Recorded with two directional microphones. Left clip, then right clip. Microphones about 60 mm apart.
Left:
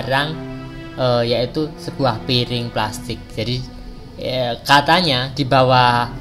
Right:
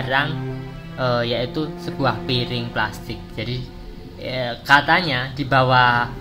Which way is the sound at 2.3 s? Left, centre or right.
Left.